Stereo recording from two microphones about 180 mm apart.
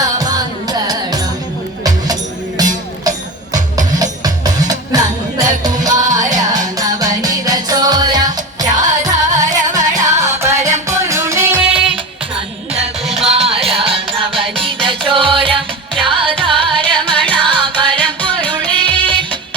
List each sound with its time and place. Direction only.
0.7 s music: 20° right (ahead or behind)
2.6 s music: 20° right (ahead or behind)
6.1 s music: 45° right (ahead or behind)
6.7 s music: 20° right (ahead or behind)
9.5 s music: 45° right (ahead or behind)
10.4 s music: 15° right (ahead or behind)
11.7 s music: 30° right (ahead or behind)
13.1 s music: 35° right (ahead or behind)
17.9 s music: 10° left (ahead or behind)
19.0 s music: 25° right (ahead or behind)